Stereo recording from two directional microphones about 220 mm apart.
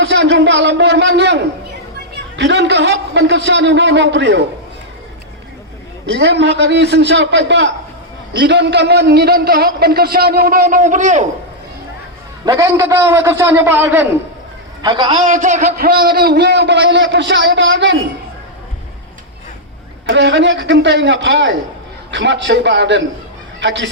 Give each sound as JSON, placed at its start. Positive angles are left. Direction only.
{"t": 0.0, "sound": "a sound", "side_deg": -50}
{"t": 2.1, "sound": "a man's voice", "side_deg": -55}
{"t": 6.1, "sound": "a man's voice", "side_deg": -50}
{"t": 12.5, "sound": "a man's voice", "side_deg": -15}
{"t": 14.8, "sound": "a man's voice", "side_deg": -20}
{"t": 15.2, "sound": "a man's voice", "side_deg": -35}
{"t": 15.9, "sound": "a man's voice", "side_deg": -45}
{"t": 20.1, "sound": "a man's voice", "side_deg": -55}